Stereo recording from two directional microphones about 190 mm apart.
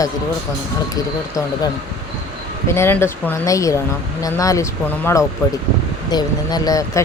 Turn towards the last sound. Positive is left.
turn(degrees=20)  # may be behind; listen again after turning